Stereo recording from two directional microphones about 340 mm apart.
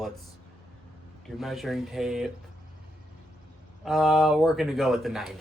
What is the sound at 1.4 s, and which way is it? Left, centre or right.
Speech, centre.